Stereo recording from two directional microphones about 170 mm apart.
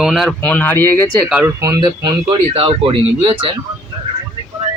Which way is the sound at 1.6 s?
20° right (ahead or behind).